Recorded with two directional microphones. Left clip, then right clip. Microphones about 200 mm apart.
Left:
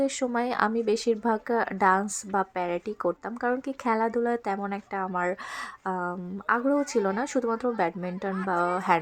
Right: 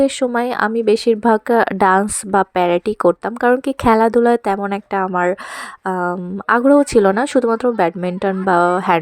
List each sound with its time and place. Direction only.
0.0 s speech: 30° right (ahead or behind)